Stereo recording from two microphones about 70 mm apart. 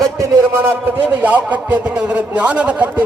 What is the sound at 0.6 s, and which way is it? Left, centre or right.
A man's voice, right.